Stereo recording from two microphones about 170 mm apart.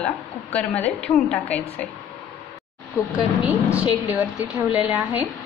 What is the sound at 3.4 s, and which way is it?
Speech, 5° right (ahead or behind).